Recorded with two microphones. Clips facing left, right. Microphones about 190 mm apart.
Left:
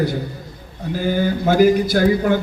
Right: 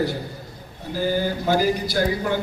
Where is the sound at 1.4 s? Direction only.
55° left (ahead or behind).